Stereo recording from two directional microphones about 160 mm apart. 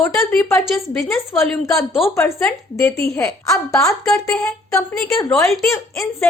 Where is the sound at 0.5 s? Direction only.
Centre (ahead or behind).